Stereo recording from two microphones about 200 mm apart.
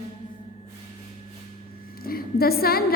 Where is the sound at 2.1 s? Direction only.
50° left (ahead or behind).